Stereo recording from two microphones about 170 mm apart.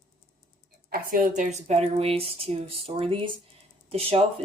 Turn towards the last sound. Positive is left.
turn(degrees=-35)  # may be behind; listen again after turning